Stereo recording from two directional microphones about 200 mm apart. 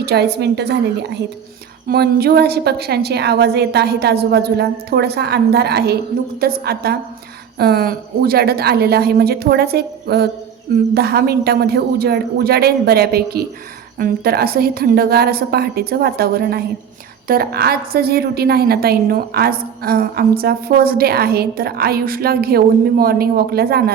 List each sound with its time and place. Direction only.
0.0 s a woman's voice: 55° right (ahead or behind)